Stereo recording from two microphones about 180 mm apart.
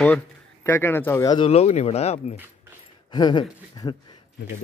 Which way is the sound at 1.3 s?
30° left (ahead or behind).